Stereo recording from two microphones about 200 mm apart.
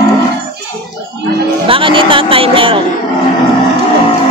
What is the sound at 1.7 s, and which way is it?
Speech, 25° right (ahead or behind).